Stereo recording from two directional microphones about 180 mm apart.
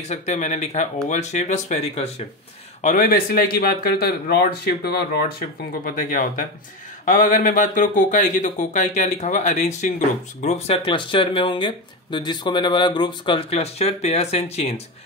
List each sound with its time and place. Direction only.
0.1 s speech: 40° left (ahead or behind)
2.8 s speech: 50° left (ahead or behind)
5.9 s speech: 50° left (ahead or behind)